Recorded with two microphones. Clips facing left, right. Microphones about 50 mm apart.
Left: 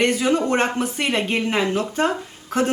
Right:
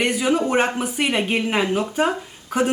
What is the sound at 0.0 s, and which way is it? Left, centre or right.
Speech, centre.